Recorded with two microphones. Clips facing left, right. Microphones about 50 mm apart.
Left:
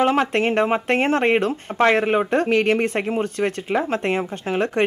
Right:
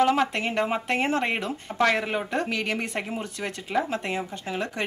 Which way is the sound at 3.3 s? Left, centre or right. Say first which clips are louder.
Left 10 dB; left.